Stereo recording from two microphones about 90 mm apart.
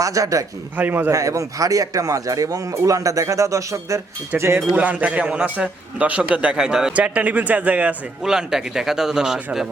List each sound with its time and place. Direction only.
0.0 s speech: 40° right (ahead or behind)
0.8 s a man's voice: 20° right (ahead or behind)
1.1 s speech: 35° right (ahead or behind)
4.7 s speech: 15° right (ahead or behind)
8.2 s a man's voice: 5° right (ahead or behind)